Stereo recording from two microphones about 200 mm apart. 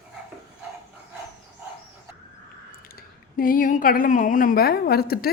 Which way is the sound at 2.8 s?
45° left (ahead or behind).